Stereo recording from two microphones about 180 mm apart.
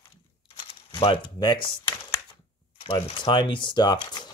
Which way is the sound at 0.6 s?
30° left (ahead or behind).